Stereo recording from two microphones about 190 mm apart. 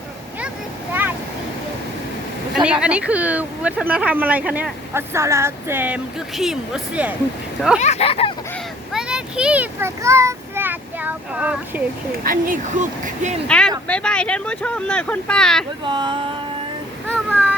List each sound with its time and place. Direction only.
2.8 s speech: 5° right (ahead or behind)
7.8 s speech: 35° left (ahead or behind)
8.9 s a child's voice: 5° right (ahead or behind)
12.2 s speech: 45° right (ahead or behind)
13.5 s speech: 5° left (ahead or behind)
15.8 s speech: 25° right (ahead or behind)
17.1 s a sound: 5° left (ahead or behind)